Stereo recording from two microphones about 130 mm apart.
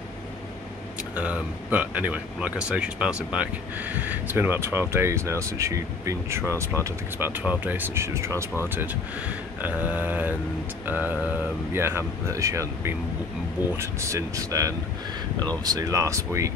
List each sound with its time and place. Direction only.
1.1 s speech: 10° right (ahead or behind)
9.6 s speech: 10° right (ahead or behind)